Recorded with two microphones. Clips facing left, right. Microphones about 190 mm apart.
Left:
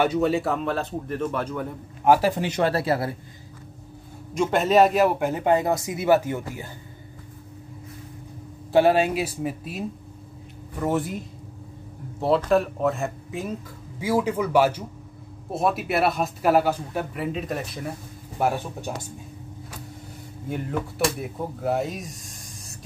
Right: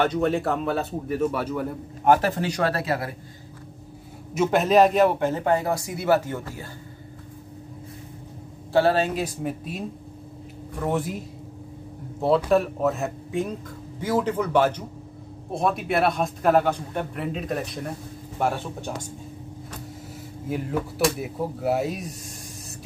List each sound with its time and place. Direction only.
0.0 s a man's voice: 5° left (ahead or behind); by 3.2 s 30° left (ahead or behind)
4.3 s speech: 5° right (ahead or behind); by 6.7 s 15° left (ahead or behind)
8.7 s a man's voice: 15° left (ahead or behind)
12.4 s a man's voice: centre (ahead or behind)
20.4 s a man's voice: centre (ahead or behind)